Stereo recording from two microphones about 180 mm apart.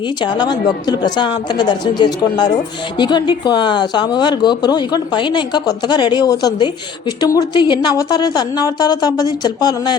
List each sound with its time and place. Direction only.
0.2 s a woman's voice: 25° left (ahead or behind)